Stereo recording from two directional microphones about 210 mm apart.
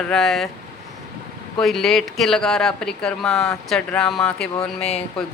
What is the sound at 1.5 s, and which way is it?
Speech, centre (ahead or behind).